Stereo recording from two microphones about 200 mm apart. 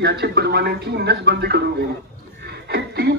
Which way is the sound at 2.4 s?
55° right (ahead or behind).